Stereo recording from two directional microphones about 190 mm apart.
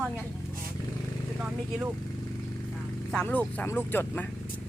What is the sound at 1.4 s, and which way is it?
Speech, 5° right (ahead or behind).